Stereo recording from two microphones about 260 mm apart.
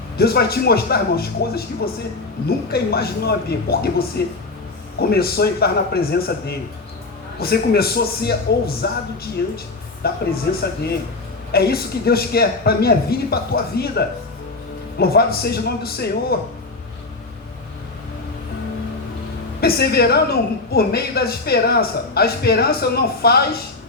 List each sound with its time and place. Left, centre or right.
0.2 s a woman's voice: left
10.0 s a woman's voice: left
11.5 s a woman's voice: left
19.6 s a woman's voice: left